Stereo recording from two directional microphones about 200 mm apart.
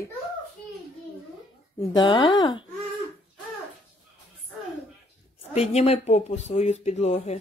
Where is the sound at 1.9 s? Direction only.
20° left (ahead or behind).